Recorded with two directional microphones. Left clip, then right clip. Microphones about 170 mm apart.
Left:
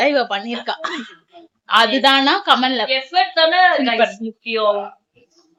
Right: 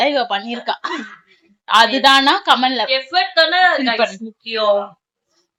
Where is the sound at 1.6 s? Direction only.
10° left (ahead or behind).